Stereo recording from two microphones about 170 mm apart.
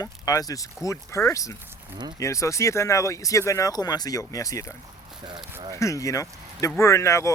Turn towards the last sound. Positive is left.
turn(degrees=15)  # may be behind; listen again after turning